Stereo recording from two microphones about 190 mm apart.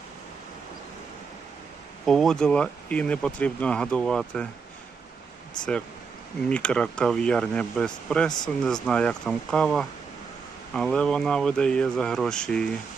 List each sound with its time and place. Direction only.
2.0 s speech: centre (ahead or behind)
6.5 s speech: 5° left (ahead or behind)